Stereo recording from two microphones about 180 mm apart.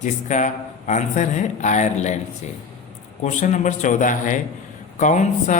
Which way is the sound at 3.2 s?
45° left (ahead or behind).